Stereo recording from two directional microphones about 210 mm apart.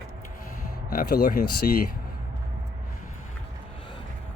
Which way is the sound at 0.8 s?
45° left (ahead or behind).